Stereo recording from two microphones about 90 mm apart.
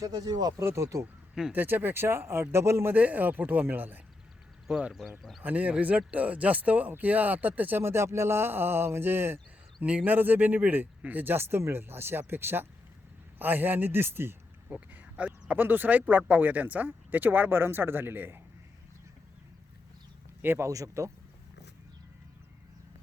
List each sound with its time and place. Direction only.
0.0 s speech: 45° right (ahead or behind)
0.6 s speech: 30° right (ahead or behind)
1.5 s speech: 20° right (ahead or behind)
2.9 s speech: 20° right (ahead or behind)
4.7 s speech: 10° right (ahead or behind)
20.4 s speech: 25° right (ahead or behind)
20.7 s speech: 35° right (ahead or behind)